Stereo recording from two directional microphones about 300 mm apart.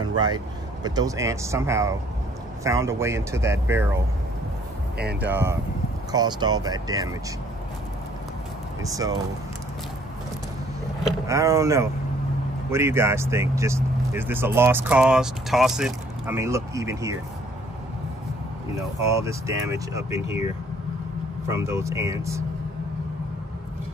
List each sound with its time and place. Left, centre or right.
0.0 s vehicle: centre
0.8 s speech: centre
4.9 s speech: right
5.3 s speech: centre
8.8 s speech: centre
11.1 s speech: centre
18.8 s speech: centre
21.5 s speech: centre